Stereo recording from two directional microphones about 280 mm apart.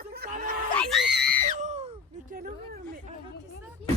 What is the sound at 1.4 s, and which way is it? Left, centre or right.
Screaming, right.